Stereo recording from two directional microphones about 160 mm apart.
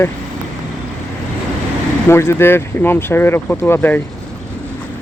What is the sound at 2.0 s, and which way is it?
Speech, 15° left (ahead or behind).